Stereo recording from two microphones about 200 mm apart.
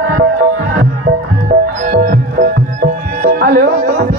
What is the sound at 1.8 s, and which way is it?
Music, 40° right (ahead or behind).